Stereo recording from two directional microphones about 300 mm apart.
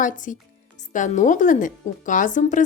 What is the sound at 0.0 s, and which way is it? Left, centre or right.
Speech, left.